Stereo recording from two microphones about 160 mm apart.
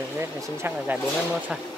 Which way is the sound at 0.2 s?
15° right (ahead or behind).